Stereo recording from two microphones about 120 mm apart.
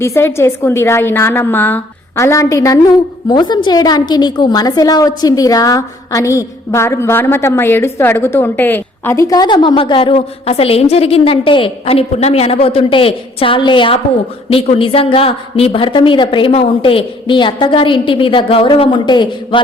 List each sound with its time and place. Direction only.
0.0 s a woman's voice: 20° left (ahead or behind); by 10.2 s 45° left (ahead or behind)
10.2 s a woman's voice: 60° left (ahead or behind); by 19.5 s 40° left (ahead or behind)